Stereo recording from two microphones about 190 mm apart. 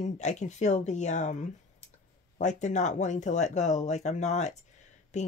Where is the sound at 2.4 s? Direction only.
40° left (ahead or behind).